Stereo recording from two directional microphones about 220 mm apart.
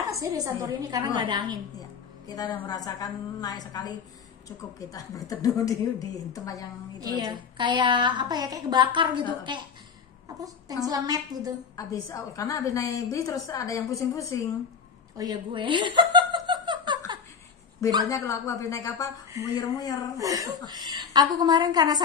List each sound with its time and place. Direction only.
0.1 s a woman's voice: 15° right (ahead or behind)
1.8 s a woman's voice: 15° left (ahead or behind)
7.0 s a woman's voice: 20° right (ahead or behind)
10.9 s a woman's voice: 15° right (ahead or behind)
11.7 s a woman's voice: 15° left (ahead or behind)
15.1 s chuckle: 20° right (ahead or behind)
18.0 s a woman's voice: 15° left (ahead or behind)
20.2 s a woman's voice: 15° right (ahead or behind)